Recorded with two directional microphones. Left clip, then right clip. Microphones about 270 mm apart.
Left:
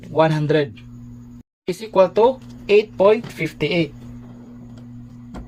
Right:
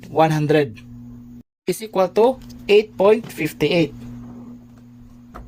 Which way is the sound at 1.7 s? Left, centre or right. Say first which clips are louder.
Left 3 dB; right.